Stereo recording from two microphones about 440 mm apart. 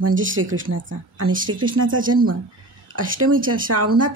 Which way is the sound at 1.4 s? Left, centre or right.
Centre.